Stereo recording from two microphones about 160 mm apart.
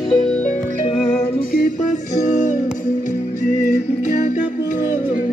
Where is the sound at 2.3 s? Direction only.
50° left (ahead or behind).